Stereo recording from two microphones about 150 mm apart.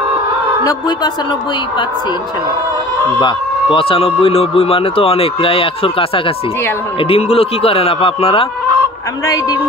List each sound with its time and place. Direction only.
0.7 s a woman's voice: 25° left (ahead or behind)
3.2 s speech: 30° left (ahead or behind)